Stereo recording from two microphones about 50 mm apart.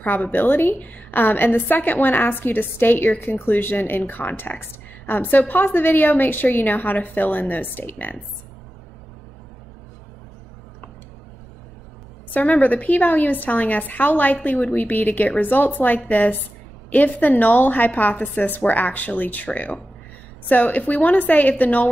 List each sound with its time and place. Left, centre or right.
0.0 s a woman's voice: left
12.3 s a woman's voice: left